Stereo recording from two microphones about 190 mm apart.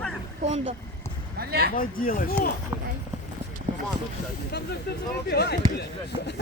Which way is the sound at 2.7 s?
10° right (ahead or behind).